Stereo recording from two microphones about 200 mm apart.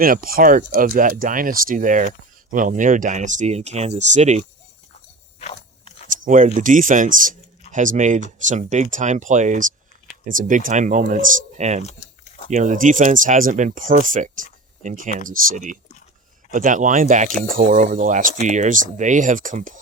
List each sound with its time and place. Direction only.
0.0 s speech: 45° right (ahead or behind)
5.4 s a sound: 30° left (ahead or behind)
6.1 s a sound: 40° right (ahead or behind)
6.6 s speech: 40° right (ahead or behind)
11.8 s crumpling: 35° left (ahead or behind)
12.5 s speech: 40° right (ahead or behind)